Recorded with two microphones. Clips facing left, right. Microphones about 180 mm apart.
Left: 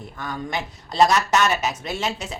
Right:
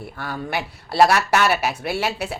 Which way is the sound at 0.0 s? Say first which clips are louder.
Right 1 dB; 10° right (ahead or behind).